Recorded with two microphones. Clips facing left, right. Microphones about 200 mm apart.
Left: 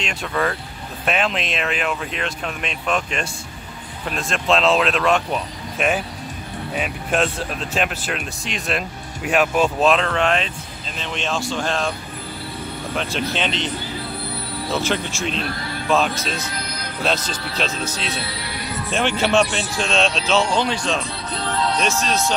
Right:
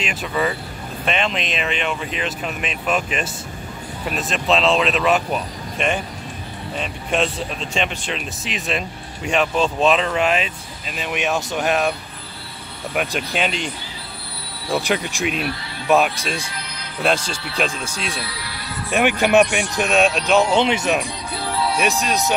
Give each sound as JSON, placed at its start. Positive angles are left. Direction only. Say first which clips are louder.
{"t": 0.0, "sound": "speech", "louder": "right 1 dB", "side_deg": -5}
{"t": 12.9, "sound": "speech", "louder": "right 2 dB", "side_deg": -15}
{"t": 14.7, "sound": "speech", "louder": "right 2 dB", "side_deg": -15}
{"t": 18.2, "sound": "music", "louder": "left 3 dB", "side_deg": 25}
{"t": 18.9, "sound": "speech", "louder": "right 3 dB", "side_deg": -15}
{"t": 20.8, "sound": "speech", "louder": "right 3 dB", "side_deg": -10}